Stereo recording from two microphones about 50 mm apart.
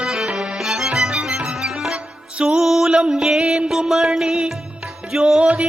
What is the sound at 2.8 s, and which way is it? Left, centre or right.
Mantra, centre.